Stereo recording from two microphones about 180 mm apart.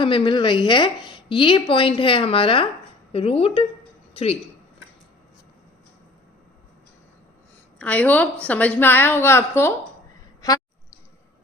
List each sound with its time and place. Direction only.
0.0 s a woman's voice: 30° left (ahead or behind)
7.8 s a woman's voice: 5° left (ahead or behind)